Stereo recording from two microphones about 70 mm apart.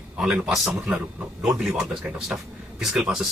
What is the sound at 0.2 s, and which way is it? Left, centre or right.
A man's voice, centre.